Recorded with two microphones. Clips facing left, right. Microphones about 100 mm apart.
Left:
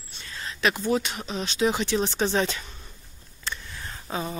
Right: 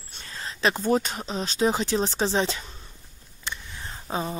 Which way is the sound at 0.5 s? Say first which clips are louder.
Right 1 dB; 30° right (ahead or behind).